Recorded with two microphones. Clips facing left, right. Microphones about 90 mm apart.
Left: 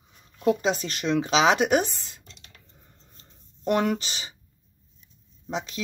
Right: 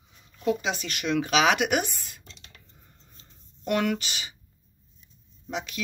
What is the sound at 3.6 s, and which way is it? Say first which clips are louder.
Speech: left 2 dB; 30° left (ahead or behind).